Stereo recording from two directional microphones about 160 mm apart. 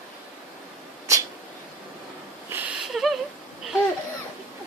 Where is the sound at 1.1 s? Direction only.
20° right (ahead or behind).